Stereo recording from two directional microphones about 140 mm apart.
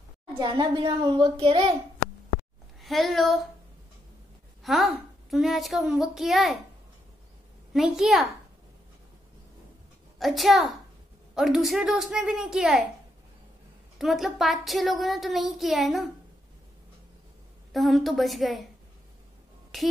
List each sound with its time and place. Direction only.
0.3 s a child's voice: 35° right (ahead or behind)
2.8 s speech: centre (ahead or behind)
4.6 s a child's voice: centre (ahead or behind)
7.7 s a child's voice: centre (ahead or behind)
10.1 s a child's voice: centre (ahead or behind)
13.9 s a child's voice: centre (ahead or behind)
17.7 s a child's voice: centre (ahead or behind)
19.7 s a child's voice: centre (ahead or behind)